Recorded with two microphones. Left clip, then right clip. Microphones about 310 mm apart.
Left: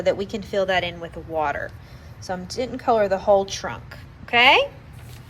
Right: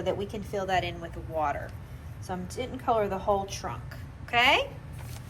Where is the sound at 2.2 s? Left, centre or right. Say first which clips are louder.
Left 8 dB; left.